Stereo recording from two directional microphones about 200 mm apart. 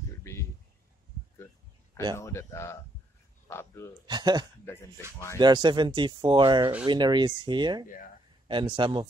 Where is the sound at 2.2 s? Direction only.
15° left (ahead or behind).